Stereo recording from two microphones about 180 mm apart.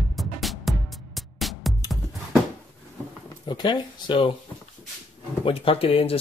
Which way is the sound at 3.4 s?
25° left (ahead or behind).